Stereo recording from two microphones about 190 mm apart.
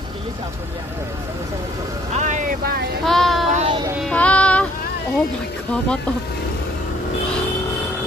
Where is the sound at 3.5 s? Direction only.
30° right (ahead or behind).